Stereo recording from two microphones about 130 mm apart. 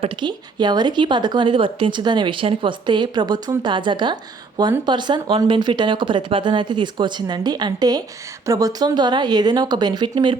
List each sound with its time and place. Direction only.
0.0 s speech: 35° right (ahead or behind)